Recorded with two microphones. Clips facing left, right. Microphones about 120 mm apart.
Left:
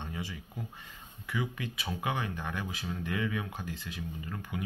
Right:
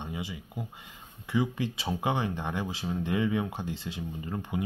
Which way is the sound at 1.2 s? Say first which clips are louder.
Right 7 dB; 25° right (ahead or behind).